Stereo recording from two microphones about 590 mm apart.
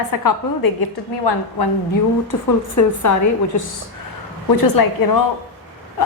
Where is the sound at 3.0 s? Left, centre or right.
Left.